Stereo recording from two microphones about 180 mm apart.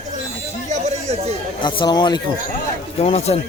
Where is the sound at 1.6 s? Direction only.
25° left (ahead or behind).